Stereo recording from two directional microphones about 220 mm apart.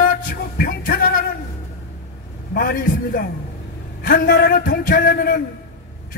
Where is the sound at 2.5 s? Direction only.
45° left (ahead or behind).